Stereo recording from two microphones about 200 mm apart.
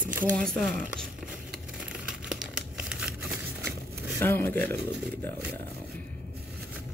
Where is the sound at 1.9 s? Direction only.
5° right (ahead or behind).